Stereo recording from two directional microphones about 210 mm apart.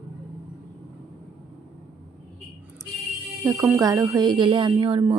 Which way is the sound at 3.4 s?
10° right (ahead or behind).